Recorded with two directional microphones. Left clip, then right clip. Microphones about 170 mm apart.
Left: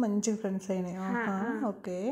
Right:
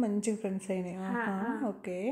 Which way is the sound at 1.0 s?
30° left (ahead or behind).